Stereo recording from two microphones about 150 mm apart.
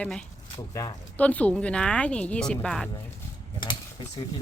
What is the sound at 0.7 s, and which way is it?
Speech, 25° left (ahead or behind).